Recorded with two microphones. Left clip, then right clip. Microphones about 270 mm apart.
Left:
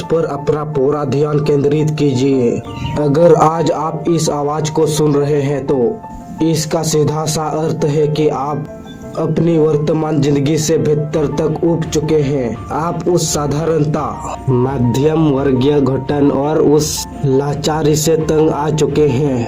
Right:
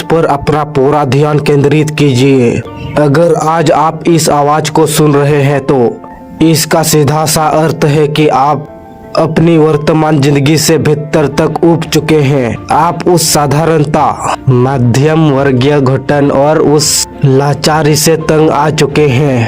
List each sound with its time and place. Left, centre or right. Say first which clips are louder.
0.1 s a man's voice: right 6 dB; right